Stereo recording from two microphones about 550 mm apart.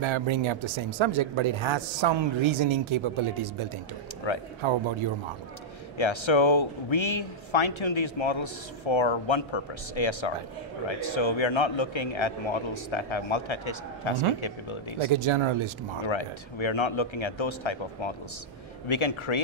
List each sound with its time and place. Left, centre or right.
0.0 s speech: right
4.2 s speech: left
4.6 s speech: right
5.9 s speech: left
15.1 s speech: right
16.0 s speech: left